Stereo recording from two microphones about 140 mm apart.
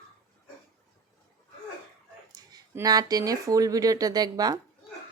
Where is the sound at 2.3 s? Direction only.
30° right (ahead or behind).